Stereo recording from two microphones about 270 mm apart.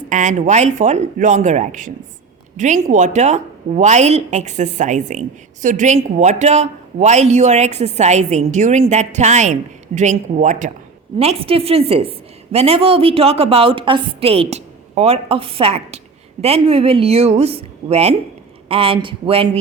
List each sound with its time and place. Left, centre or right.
0.1 s speech: right